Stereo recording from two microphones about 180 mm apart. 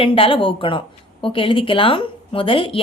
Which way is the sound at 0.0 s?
30° left (ahead or behind).